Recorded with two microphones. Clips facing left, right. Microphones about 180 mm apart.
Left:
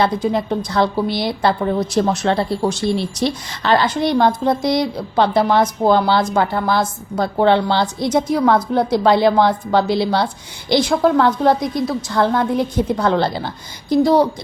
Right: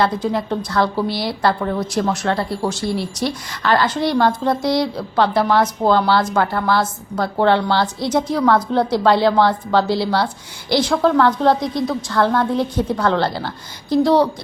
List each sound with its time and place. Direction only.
0.0 s a woman's voice: 20° left (ahead or behind)